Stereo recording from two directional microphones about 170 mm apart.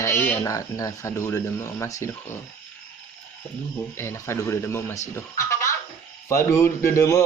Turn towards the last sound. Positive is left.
turn(degrees=15)  # may be behind; listen again after turning